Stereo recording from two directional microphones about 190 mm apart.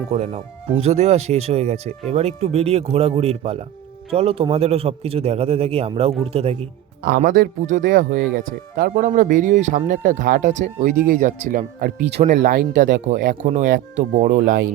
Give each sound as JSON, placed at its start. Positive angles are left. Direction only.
{"t": 0.1, "sound": "speech", "side_deg": -40}
{"t": 7.2, "sound": "speech", "side_deg": -45}